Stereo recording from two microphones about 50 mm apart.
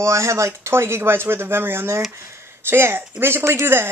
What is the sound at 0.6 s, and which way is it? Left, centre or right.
Speech, right.